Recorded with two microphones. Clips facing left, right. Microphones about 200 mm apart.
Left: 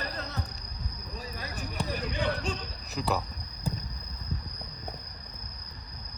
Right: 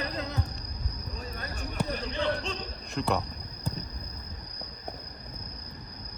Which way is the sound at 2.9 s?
5° left (ahead or behind).